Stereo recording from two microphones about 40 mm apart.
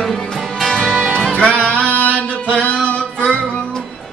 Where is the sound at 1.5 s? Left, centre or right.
Left.